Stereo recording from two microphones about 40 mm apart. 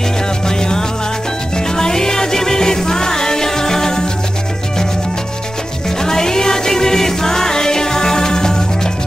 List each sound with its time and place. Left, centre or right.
0.5 s music: centre
5.9 s music: centre